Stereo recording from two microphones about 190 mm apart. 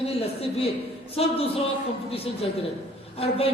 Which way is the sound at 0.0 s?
30° left (ahead or behind).